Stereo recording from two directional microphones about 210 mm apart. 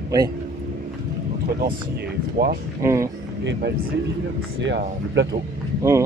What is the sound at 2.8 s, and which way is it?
Speech, 15° right (ahead or behind).